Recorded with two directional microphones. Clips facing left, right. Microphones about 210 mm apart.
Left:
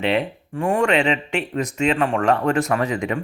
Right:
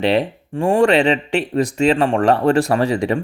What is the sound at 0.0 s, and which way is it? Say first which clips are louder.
Speech: right 4 dB; 35° right (ahead or behind).